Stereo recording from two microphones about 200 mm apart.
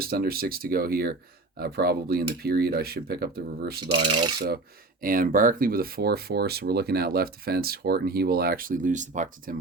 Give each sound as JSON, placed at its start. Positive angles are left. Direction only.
{"t": 0.0, "sound": "speech", "side_deg": -50}
{"t": 3.8, "sound": "speech", "side_deg": -25}
{"t": 4.4, "sound": "speech", "side_deg": -50}